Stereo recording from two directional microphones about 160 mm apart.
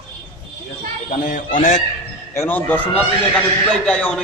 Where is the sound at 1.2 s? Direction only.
55° left (ahead or behind).